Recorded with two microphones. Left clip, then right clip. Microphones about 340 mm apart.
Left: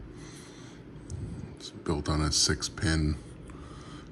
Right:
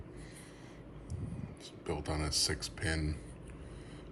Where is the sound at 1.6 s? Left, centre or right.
Centre.